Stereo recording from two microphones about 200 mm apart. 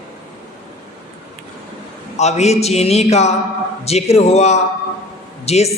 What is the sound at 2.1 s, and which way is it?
A man's voice, 35° left (ahead or behind).